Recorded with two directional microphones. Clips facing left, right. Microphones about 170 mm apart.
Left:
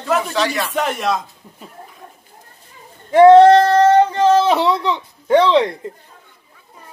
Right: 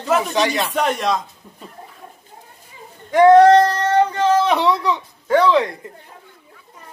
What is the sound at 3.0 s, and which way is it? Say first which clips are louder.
Speech: left 3 dB; 30° left (ahead or behind).